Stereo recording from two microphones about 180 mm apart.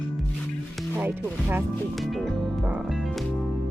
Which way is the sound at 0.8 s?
10° right (ahead or behind).